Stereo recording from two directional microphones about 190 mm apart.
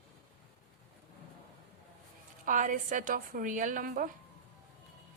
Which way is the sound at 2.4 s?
45° right (ahead or behind).